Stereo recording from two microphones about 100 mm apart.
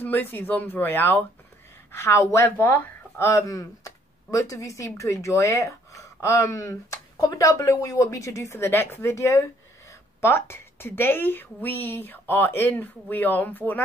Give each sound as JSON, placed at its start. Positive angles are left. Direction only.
{"t": 0.0, "sound": "a woman's voice", "side_deg": 20}